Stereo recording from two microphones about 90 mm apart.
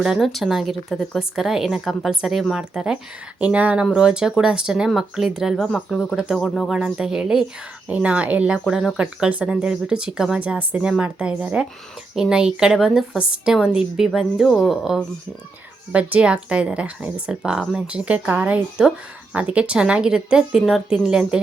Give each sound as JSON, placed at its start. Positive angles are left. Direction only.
{"t": 0.0, "sound": "a woman's voice", "side_deg": 0}
{"t": 5.7, "sound": "a woman's voice", "side_deg": 5}
{"t": 6.7, "sound": "speech", "side_deg": -10}
{"t": 8.5, "sound": "a woman's voice", "side_deg": 0}
{"t": 15.9, "sound": "speech", "side_deg": -15}